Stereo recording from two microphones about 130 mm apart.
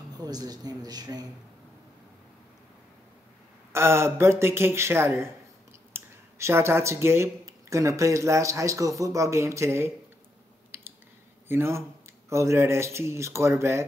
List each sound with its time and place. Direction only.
0.2 s speech: 30° right (ahead or behind)
3.7 s speech: 20° right (ahead or behind)
10.7 s a sound: 20° right (ahead or behind)
11.4 s speech: 20° right (ahead or behind)